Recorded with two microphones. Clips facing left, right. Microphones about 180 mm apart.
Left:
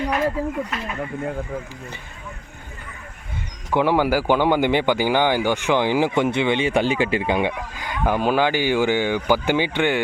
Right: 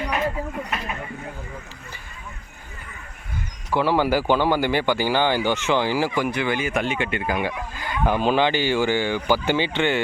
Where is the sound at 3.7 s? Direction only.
15° left (ahead or behind).